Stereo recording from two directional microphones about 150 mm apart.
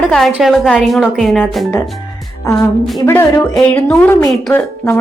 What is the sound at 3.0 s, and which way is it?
A woman's voice, 20° left (ahead or behind).